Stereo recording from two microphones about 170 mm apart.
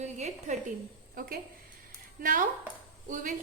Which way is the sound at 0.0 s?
45° right (ahead or behind).